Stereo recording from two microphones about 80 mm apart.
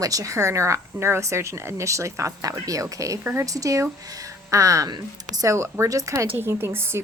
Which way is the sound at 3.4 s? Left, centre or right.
Right.